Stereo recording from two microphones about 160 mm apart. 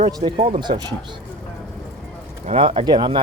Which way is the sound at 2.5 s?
35° right (ahead or behind).